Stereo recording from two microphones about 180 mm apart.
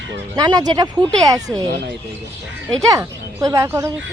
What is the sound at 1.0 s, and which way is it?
Speech, 5° left (ahead or behind).